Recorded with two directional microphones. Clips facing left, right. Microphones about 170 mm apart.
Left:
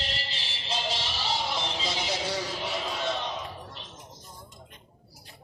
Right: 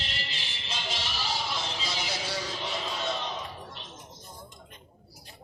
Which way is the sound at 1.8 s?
20° left (ahead or behind).